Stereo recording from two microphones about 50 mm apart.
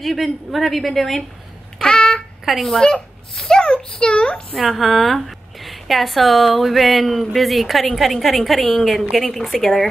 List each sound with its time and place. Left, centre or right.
0.0 s a woman's voice: centre
1.8 s babbling: centre
2.4 s a child's voice: centre; by 4.6 s left
4.6 s a woman's voice: centre